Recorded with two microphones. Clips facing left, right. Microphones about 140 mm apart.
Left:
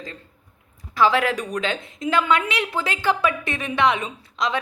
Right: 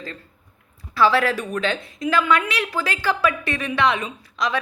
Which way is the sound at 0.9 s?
15° left (ahead or behind).